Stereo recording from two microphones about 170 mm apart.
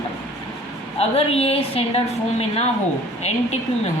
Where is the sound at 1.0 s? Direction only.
35° left (ahead or behind).